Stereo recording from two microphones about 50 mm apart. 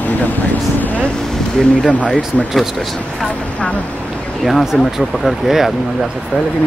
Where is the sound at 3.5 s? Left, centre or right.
Left.